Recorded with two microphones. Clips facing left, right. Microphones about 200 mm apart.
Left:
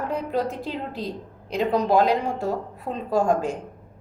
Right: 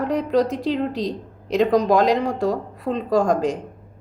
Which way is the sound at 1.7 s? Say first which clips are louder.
Right 3 dB; 40° right (ahead or behind).